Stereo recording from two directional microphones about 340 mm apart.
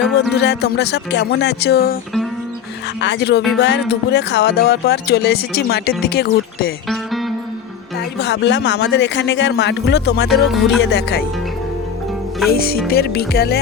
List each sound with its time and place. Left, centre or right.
0.1 s speech: left
3.0 s speech: left
6.8 s music: centre
8.2 s speech: left
12.5 s speech: left